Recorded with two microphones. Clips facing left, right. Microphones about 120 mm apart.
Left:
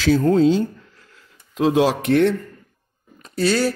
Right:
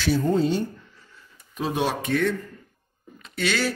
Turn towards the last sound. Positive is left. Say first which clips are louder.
# left 6 dB
turn(degrees=35)  # may be behind; listen again after turning